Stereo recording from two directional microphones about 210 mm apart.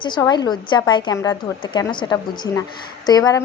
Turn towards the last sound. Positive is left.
turn(degrees=20)  # may be behind; listen again after turning